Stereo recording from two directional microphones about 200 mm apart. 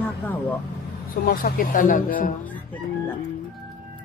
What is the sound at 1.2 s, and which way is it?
Speech, 45° left (ahead or behind).